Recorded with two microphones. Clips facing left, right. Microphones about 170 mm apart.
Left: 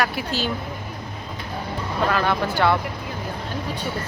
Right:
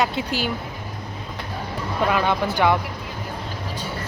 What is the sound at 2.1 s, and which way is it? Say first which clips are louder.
Speech: right 1 dB; 15° right (ahead or behind).